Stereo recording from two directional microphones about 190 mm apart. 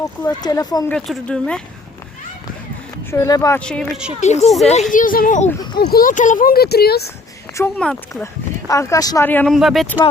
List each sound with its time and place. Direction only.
0.0 s speech: 20° left (ahead or behind)
0.9 s speech: centre (ahead or behind)
3.1 s speech: 15° left (ahead or behind)
3.6 s speech: 5° left (ahead or behind)
4.2 s speech: 35° left (ahead or behind); by 7.0 s 55° left (ahead or behind)
7.5 s speech: 10° left (ahead or behind)
8.6 s speech: 15° left (ahead or behind)